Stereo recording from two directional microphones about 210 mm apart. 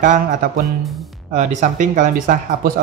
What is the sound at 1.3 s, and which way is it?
Speech, 35° right (ahead or behind).